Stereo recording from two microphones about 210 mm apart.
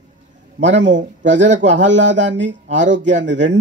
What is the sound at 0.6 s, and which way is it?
A man's voice, 60° right (ahead or behind).